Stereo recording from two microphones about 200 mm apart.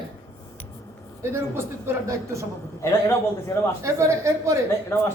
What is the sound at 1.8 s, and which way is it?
Speech, 15° right (ahead or behind).